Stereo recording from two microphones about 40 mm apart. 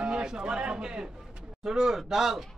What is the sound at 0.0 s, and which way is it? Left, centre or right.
Speech, centre.